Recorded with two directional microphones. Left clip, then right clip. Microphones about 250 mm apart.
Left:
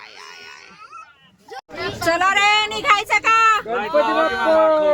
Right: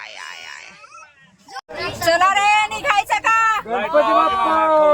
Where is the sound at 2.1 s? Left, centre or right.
Centre.